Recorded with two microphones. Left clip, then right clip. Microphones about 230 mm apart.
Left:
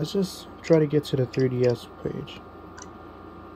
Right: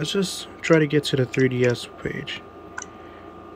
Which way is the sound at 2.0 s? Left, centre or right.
Right.